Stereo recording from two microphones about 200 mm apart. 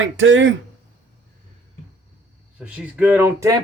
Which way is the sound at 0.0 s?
70° right (ahead or behind).